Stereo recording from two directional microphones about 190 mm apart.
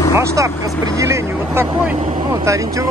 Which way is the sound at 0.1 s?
15° right (ahead or behind).